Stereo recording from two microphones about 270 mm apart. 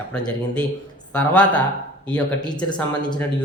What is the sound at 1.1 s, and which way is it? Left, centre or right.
Speech, centre.